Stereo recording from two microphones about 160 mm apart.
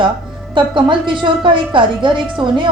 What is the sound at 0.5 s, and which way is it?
A woman's voice, 30° right (ahead or behind).